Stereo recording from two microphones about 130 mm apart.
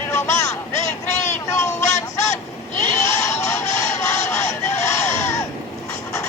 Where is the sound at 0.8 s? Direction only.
65° left (ahead or behind).